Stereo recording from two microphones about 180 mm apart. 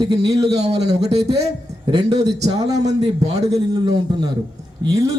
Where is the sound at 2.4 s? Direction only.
40° right (ahead or behind).